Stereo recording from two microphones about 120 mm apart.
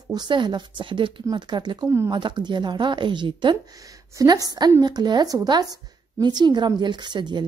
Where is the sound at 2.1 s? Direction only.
40° right (ahead or behind).